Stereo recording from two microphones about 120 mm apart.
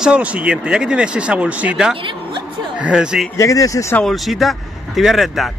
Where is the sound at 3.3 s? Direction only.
25° left (ahead or behind).